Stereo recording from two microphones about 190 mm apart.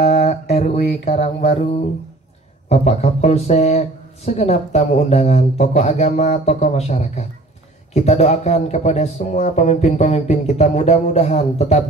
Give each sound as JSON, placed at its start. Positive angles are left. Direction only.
{"t": 0.1, "sound": "music", "side_deg": 35}
{"t": 2.7, "sound": "speech", "side_deg": 35}